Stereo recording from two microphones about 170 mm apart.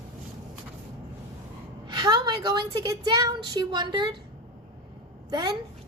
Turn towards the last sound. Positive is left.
turn(degrees=-25)  # may be behind; listen again after turning